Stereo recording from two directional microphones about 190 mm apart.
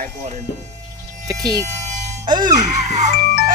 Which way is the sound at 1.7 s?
35° right (ahead or behind).